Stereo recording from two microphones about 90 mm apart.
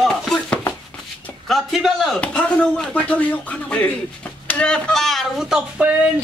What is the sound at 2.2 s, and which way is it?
Speech, 15° left (ahead or behind).